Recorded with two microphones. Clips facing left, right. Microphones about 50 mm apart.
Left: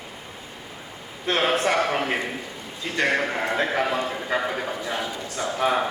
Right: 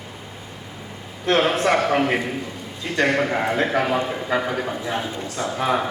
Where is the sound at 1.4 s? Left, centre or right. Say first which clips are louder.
Right 1 dB; right.